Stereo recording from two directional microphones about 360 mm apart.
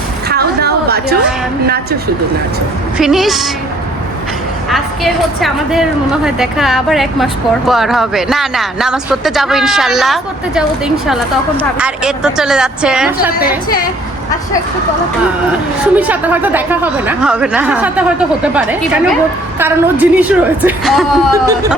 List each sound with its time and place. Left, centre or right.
0.3 s a sound: right
1.6 s a woman's voice: right
3.0 s a woman's voice: centre
4.7 s a woman's voice: centre
15.8 s a woman's voice: centre